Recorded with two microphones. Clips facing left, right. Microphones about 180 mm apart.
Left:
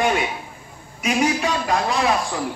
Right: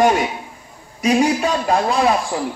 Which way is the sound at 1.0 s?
30° right (ahead or behind).